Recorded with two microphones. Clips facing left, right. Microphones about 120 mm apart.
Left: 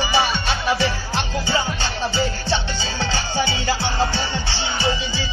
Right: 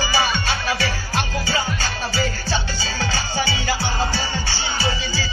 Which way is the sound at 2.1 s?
20° left (ahead or behind).